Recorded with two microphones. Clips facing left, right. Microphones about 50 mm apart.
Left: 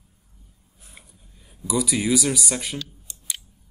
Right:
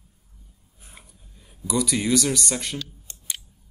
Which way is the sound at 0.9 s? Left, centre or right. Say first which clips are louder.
Even; centre.